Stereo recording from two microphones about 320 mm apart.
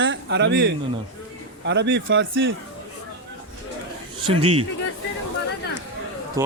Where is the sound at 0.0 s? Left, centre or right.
Right.